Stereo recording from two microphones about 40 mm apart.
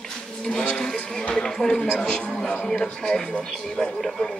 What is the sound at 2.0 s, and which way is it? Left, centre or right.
A man's voice, left.